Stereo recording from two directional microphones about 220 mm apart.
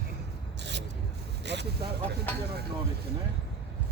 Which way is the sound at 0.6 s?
50° right (ahead or behind).